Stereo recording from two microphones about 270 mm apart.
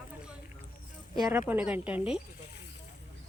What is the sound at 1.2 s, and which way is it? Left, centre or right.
A woman's voice, centre.